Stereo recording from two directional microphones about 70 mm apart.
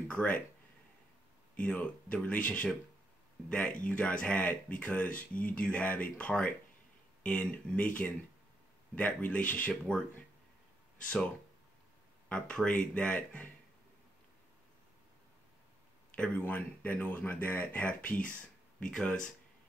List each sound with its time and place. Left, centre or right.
0.1 s speech: centre
1.6 s speech: centre
12.3 s speech: centre
16.3 s speech: left
18.9 s speech: centre